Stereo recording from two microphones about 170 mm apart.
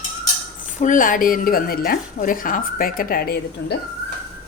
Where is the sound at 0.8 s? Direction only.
50° left (ahead or behind); by 3.8 s 65° left (ahead or behind).